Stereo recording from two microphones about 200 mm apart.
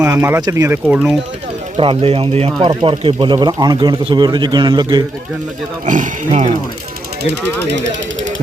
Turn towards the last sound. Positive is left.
turn(degrees=-60)  # may be behind; listen again after turning